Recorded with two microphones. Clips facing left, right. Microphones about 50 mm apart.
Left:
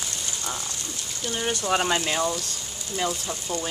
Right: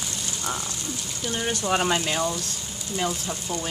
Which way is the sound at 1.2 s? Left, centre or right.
Centre.